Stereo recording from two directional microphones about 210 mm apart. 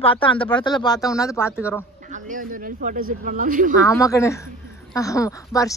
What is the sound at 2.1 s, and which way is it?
Speech, 40° right (ahead or behind).